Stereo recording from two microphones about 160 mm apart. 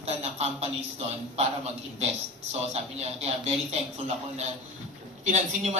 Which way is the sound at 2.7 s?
40° right (ahead or behind).